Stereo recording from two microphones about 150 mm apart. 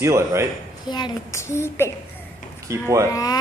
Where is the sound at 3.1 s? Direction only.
25° left (ahead or behind).